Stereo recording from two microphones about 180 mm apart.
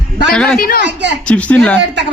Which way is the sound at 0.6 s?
55° left (ahead or behind).